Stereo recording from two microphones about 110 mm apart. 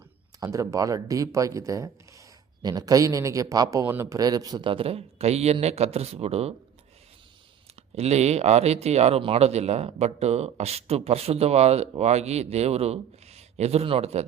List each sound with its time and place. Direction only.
0.3 s speech: 30° right (ahead or behind)
3.8 s speech: 20° right (ahead or behind)
4.2 s speech: 35° right (ahead or behind)
4.6 s speech: 55° right (ahead or behind)
7.9 s speech: 75° right (ahead or behind)